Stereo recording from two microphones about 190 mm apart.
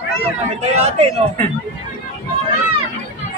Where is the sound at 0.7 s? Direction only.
35° right (ahead or behind).